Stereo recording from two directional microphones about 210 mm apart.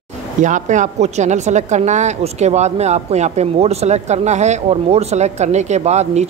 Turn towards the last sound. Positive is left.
turn(degrees=-30)  # may be behind; listen again after turning